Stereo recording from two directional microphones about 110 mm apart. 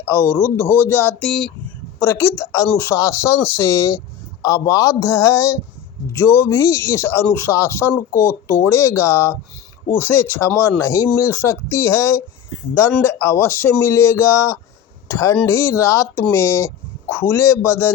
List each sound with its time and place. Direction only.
0.4 s speech: 20° right (ahead or behind)
0.9 s speech: 15° left (ahead or behind)
1.3 s speech: 5° left (ahead or behind)
2.0 s speech: 25° left (ahead or behind)
8.1 s speech: 15° right (ahead or behind)
8.6 s speech: 20° left (ahead or behind)